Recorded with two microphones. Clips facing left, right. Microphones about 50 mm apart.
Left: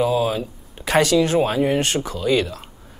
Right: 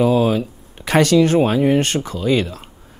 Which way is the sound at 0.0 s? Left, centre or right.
Right.